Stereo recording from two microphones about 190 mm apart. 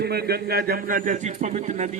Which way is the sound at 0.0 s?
55° right (ahead or behind).